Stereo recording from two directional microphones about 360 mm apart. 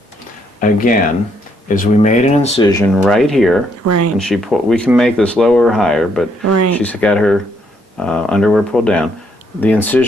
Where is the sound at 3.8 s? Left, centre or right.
Right.